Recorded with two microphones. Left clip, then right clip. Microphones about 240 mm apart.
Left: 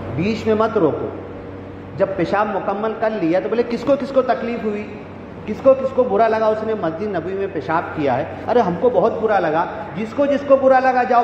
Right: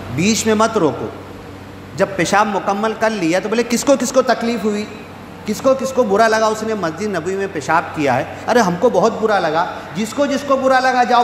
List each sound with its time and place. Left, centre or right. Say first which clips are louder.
0.2 s a man's voice: right 3 dB; right
2.0 s a man's voice: right 3 dB; right